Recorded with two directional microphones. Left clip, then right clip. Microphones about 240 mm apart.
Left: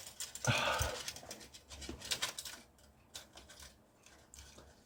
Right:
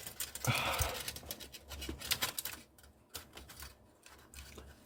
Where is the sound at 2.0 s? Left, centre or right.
Right.